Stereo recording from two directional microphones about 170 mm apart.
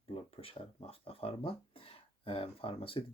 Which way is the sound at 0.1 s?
35° left (ahead or behind).